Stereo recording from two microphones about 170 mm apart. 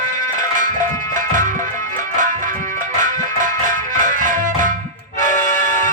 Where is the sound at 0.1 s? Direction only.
50° right (ahead or behind).